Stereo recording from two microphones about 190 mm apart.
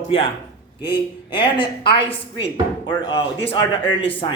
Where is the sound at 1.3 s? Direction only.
25° left (ahead or behind).